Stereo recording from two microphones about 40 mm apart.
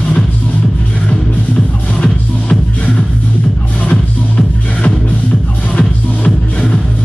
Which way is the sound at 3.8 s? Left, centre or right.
Left.